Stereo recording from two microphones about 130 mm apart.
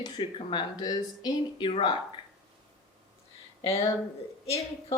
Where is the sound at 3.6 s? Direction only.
50° left (ahead or behind).